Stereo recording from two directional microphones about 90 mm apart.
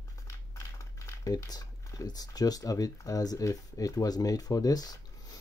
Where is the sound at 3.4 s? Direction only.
40° left (ahead or behind).